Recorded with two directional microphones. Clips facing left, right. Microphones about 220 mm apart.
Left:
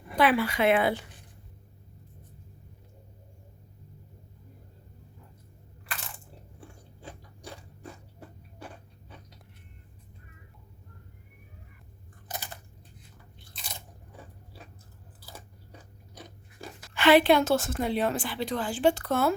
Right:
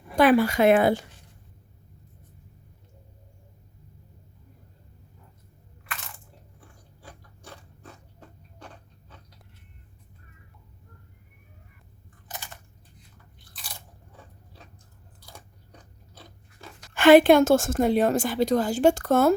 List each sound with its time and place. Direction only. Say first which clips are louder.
0.2 s a woman's voice: right 6 dB; 45° right (ahead or behind)
5.8 s crushing: right 1 dB; 30° left (ahead or behind)
7.0 s gears: left 4 dB; 15° left (ahead or behind)
13.5 s crunch: left 1 dB; 20° left (ahead or behind)
15.2 s biting: left 1 dB; 5° left (ahead or behind)
16.9 s a woman's voice: right 6 dB; 45° right (ahead or behind)